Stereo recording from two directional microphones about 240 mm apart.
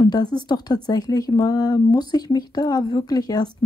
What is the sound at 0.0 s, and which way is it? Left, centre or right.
Speech, centre.